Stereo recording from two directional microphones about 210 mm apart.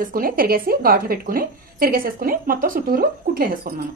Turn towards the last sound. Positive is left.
turn(degrees=-45)  # may be behind; listen again after turning